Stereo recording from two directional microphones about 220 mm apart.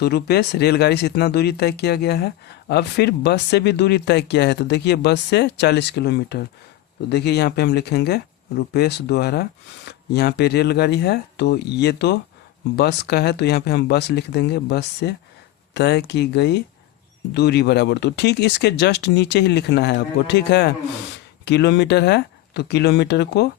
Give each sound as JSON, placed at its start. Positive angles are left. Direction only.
{"t": 0.0, "sound": "speech", "side_deg": 45}